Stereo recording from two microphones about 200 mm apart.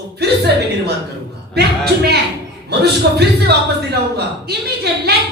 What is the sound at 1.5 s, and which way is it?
A man's voice, 55° right (ahead or behind).